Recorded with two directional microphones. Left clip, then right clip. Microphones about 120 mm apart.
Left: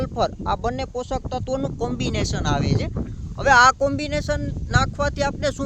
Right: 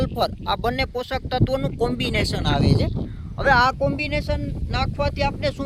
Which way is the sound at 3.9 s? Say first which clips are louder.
Left 1 dB; 30° left (ahead or behind).